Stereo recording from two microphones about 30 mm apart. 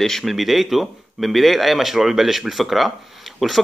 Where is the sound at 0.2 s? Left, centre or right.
Centre.